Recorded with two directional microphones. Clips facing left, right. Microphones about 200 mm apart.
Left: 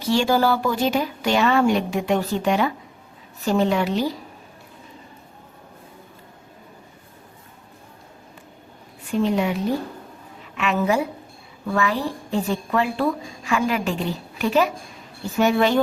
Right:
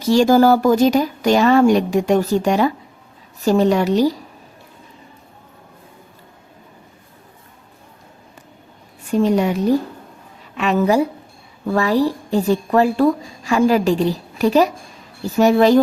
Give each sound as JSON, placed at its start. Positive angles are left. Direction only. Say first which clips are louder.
{"t": 0.0, "sound": "a woman's voice", "louder": "right 7 dB", "side_deg": -40}
{"t": 9.1, "sound": "a woman's voice", "louder": "right 5 dB", "side_deg": -40}